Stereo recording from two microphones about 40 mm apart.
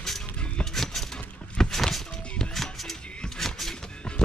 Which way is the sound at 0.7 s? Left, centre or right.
Centre.